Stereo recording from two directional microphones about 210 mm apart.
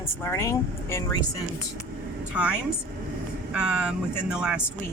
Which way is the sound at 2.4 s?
5° right (ahead or behind).